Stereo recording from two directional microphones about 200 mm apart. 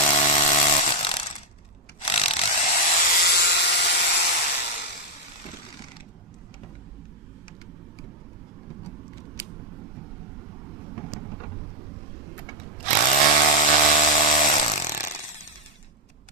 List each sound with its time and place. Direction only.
0.0 s power tool: 35° left (ahead or behind)
2.0 s rub: 30° left (ahead or behind)
3.2 s a sound: 55° left (ahead or behind)
12.9 s tools: 35° left (ahead or behind)